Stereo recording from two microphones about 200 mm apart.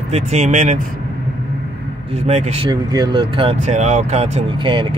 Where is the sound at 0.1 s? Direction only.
35° right (ahead or behind).